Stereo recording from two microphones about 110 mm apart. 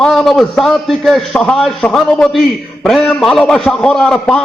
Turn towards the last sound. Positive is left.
turn(degrees=5)  # may be behind; listen again after turning